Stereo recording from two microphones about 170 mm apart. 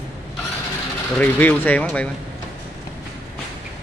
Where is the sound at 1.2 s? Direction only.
10° left (ahead or behind).